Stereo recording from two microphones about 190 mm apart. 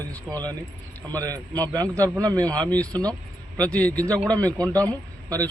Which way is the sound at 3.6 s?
5° left (ahead or behind).